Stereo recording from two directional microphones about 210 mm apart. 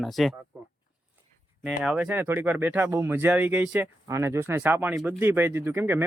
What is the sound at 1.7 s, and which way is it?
Speech, 5° right (ahead or behind).